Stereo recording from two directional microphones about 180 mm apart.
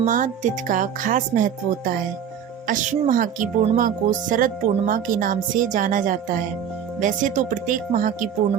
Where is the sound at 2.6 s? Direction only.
45° right (ahead or behind).